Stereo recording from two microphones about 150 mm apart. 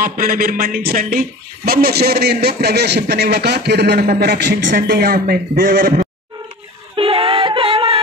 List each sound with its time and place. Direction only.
0.0 s speech: 70° right (ahead or behind)
1.7 s a man's voice: 90° right; by 6.0 s 70° right (ahead or behind)
7.0 s music: 40° right (ahead or behind)